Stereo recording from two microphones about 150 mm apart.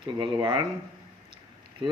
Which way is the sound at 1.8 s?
35° right (ahead or behind).